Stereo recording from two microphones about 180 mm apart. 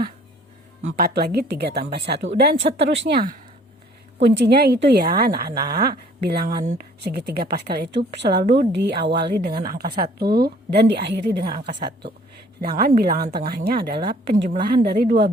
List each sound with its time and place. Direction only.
0.9 s a woman's voice: 55° right (ahead or behind)
2.7 s speech: 45° right (ahead or behind)
3.0 s a woman's voice: 60° right (ahead or behind)
9.6 s a woman's voice: 55° right (ahead or behind)